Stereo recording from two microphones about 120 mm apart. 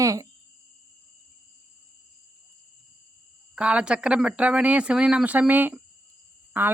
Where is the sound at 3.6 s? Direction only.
10° right (ahead or behind).